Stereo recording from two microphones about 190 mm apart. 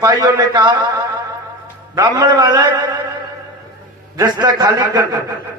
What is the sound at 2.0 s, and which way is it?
Speech, 20° right (ahead or behind).